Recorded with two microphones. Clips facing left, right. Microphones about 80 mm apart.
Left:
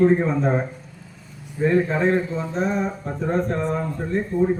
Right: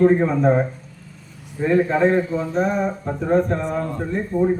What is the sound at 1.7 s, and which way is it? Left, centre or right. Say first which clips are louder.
A man's voice: right 3 dB; right.